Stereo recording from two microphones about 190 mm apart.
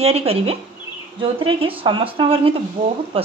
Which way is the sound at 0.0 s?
30° right (ahead or behind).